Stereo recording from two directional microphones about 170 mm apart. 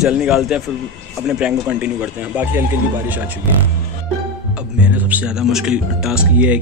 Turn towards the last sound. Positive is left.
turn(degrees=-5)  # may be behind; listen again after turning